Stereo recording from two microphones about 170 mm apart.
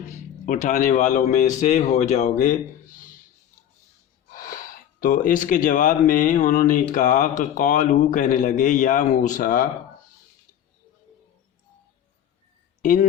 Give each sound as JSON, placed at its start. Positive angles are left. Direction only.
{"t": 0.4, "sound": "speech", "side_deg": 45}
{"t": 4.3, "sound": "speech", "side_deg": 55}
{"t": 12.8, "sound": "speech", "side_deg": 50}